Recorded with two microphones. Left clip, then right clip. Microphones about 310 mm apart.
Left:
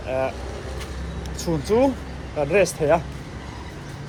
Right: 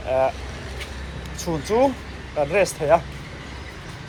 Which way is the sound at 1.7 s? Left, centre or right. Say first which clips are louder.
Even; centre.